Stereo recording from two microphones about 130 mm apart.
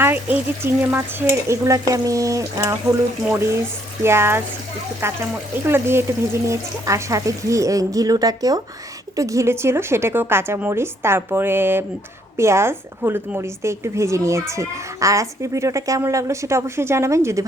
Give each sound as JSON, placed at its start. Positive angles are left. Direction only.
{"t": 0.0, "sound": "a woman's voice", "side_deg": -15}